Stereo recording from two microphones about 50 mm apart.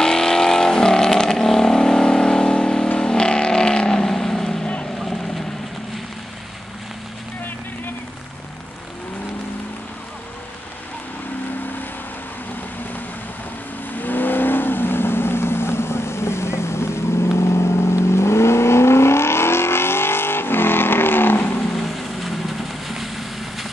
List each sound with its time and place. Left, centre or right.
0.0 s vehicle: centre
14.0 s vehicle: left
21.5 s vehicle: centre